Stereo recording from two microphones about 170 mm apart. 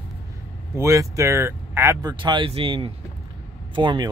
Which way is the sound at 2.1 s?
25° right (ahead or behind).